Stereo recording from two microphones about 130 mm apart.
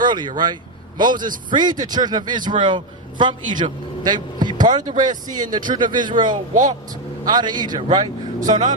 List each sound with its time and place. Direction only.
0.0 s a man's voice: 35° right (ahead or behind)
6.5 s speech: 80° right
7.3 s a man's voice: 35° right (ahead or behind)